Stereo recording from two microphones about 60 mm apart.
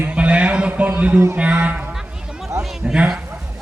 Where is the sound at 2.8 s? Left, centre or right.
Centre.